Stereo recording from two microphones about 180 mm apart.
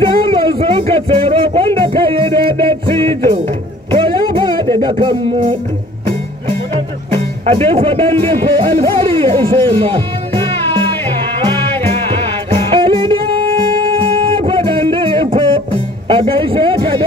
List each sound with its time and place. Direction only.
0.0 s music: 30° right (ahead or behind)
4.7 s speech: 25° right (ahead or behind)
7.1 s speech: 30° right (ahead or behind)
11.9 s music: 30° right (ahead or behind)